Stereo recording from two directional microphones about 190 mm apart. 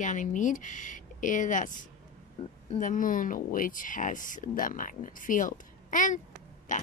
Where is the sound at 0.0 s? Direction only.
40° left (ahead or behind).